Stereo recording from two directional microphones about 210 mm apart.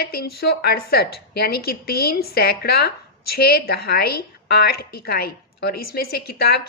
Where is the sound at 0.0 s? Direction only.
45° left (ahead or behind).